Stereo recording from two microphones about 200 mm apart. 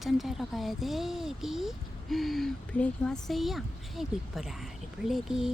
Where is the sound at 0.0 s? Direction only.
Centre (ahead or behind).